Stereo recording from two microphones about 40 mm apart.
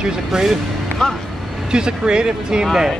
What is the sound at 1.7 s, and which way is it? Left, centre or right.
Speech, right.